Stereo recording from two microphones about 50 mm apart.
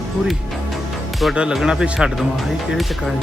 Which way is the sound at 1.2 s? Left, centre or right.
Centre.